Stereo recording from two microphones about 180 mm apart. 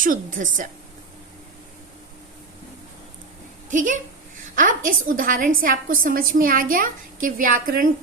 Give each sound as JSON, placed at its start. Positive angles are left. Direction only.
{"t": 0.0, "sound": "a woman's voice", "side_deg": -50}
{"t": 3.7, "sound": "a woman's voice", "side_deg": -45}